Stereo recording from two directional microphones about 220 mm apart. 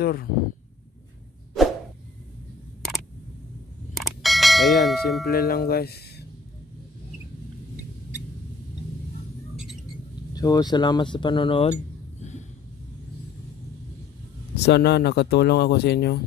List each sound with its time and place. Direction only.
0.0 s speech: 45° left (ahead or behind)
3.9 s clang: centre (ahead or behind)
5.2 s speech: 45° left (ahead or behind)
10.3 s speech: 15° left (ahead or behind)
14.6 s speech: 50° left (ahead or behind)